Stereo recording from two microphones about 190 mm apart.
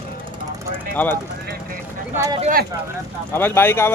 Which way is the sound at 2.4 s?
45° right (ahead or behind).